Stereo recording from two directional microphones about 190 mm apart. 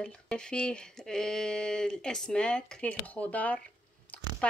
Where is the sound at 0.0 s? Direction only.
5° left (ahead or behind).